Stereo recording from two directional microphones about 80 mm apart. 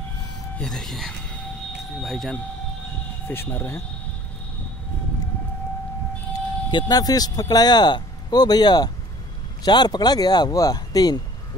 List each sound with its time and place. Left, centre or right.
0.6 s speech: centre
3.3 s speech: left
6.9 s speech: left